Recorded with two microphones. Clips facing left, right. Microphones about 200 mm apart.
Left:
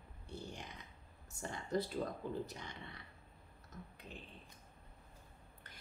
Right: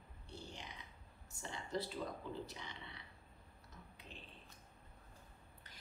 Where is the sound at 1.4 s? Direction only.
50° left (ahead or behind).